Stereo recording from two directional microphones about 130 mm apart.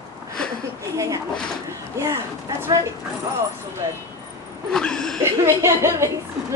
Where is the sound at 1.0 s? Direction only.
25° right (ahead or behind).